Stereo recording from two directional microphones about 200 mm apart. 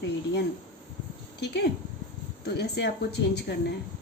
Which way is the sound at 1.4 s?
55° left (ahead or behind).